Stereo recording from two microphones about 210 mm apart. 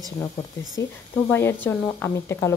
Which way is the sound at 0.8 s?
55° left (ahead or behind).